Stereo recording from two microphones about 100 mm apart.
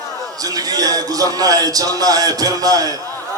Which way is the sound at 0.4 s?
40° right (ahead or behind).